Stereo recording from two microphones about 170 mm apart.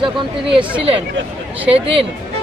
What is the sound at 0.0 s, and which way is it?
Speech, 30° right (ahead or behind).